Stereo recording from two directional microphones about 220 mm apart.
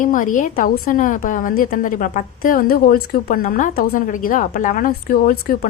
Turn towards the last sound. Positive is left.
turn(degrees=40)  # may be behind; listen again after turning